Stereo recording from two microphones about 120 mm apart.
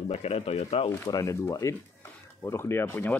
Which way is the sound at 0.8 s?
30° left (ahead or behind).